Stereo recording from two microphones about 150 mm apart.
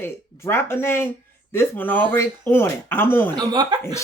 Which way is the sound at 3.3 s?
30° right (ahead or behind).